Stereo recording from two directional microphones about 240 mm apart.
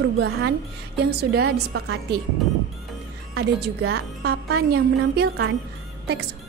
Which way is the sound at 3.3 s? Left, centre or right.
Right.